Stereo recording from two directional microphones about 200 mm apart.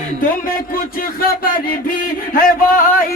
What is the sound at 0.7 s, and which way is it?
Speech, 45° left (ahead or behind).